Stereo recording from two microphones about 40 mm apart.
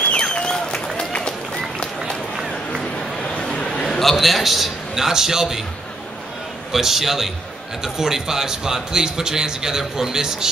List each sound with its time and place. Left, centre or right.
0.2 s applause: centre
0.9 s run: left
2.8 s a sound: centre
4.0 s a man's voice: centre
6.7 s a man's voice: centre